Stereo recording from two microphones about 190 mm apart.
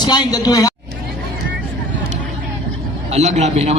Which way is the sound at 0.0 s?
20° left (ahead or behind).